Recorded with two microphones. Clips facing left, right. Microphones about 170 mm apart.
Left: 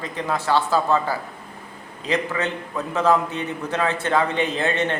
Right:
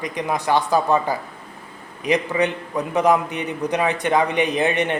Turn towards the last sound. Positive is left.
turn(degrees=-15)  # may be behind; listen again after turning